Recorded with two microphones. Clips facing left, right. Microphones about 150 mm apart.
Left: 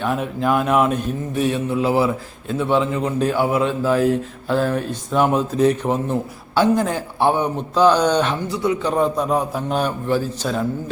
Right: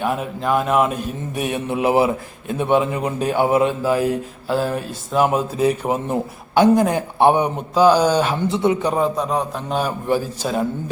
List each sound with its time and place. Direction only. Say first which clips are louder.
0.0 s a man's voice: left 1 dB; 5° right (ahead or behind)
1.4 s a man's voice: left 1 dB; 15° right (ahead or behind)
7.8 s a man's voice: right 1 dB; 10° right (ahead or behind)
8.4 s speech: right 3 dB; 25° right (ahead or behind)
9.0 s a man's voice: left 1 dB; centre (ahead or behind)
10.1 s a man's voice: even; 10° right (ahead or behind)